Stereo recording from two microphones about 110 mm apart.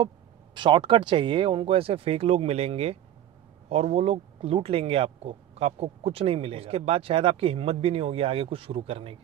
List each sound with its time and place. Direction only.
0.6 s speech: 50° right (ahead or behind)